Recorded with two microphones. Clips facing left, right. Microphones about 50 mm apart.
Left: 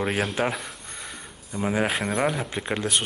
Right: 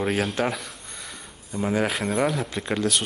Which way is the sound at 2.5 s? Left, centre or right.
Left.